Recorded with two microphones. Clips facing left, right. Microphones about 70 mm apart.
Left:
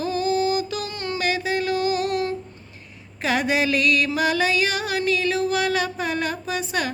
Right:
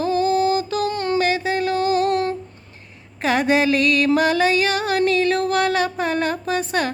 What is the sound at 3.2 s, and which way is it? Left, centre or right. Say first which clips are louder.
Music: right 4 dB; right.